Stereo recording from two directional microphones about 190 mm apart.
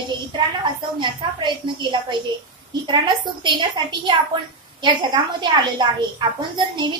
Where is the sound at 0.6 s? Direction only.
25° right (ahead or behind).